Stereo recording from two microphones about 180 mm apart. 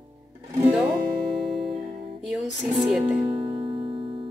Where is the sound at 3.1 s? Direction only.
30° right (ahead or behind).